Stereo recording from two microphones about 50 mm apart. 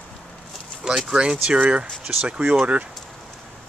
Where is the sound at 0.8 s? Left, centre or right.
Centre.